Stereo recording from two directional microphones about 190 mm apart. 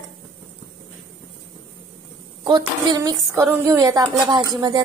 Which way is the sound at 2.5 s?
20° right (ahead or behind).